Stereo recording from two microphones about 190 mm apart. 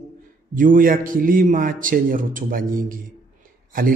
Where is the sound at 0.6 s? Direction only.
45° right (ahead or behind).